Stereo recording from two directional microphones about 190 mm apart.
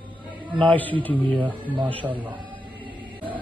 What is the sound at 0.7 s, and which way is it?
Speech, 10° left (ahead or behind).